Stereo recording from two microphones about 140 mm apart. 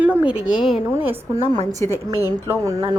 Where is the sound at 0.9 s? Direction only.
15° right (ahead or behind).